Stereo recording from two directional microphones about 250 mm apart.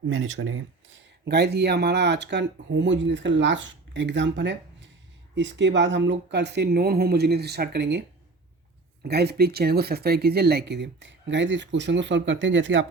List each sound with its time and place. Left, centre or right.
0.1 s speech: right
1.2 s speech: right
9.0 s speech: right